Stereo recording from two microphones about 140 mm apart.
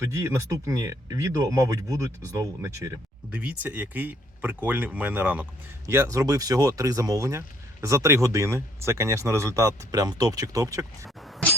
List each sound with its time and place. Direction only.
0.0 s speech: 20° right (ahead or behind)